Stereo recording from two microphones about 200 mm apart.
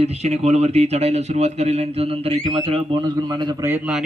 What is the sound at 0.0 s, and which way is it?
A man's voice, 30° right (ahead or behind).